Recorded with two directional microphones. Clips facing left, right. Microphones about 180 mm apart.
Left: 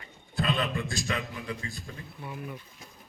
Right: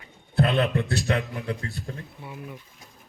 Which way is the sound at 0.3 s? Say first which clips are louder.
Right 7 dB; 60° right (ahead or behind).